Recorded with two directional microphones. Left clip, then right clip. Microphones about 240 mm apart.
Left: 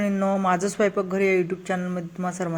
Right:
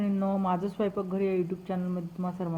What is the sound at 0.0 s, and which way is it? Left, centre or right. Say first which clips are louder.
A woman's voice: left 7 dB; left.